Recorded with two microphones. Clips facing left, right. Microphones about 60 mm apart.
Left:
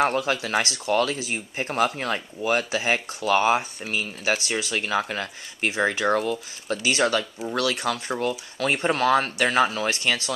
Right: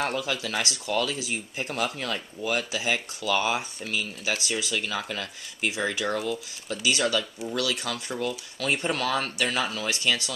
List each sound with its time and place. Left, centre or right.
0.0 s speech: left